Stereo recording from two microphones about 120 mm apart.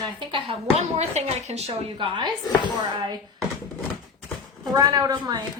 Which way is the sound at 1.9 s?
40° right (ahead or behind).